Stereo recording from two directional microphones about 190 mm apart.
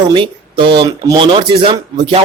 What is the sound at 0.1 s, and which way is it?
Speech, 25° right (ahead or behind).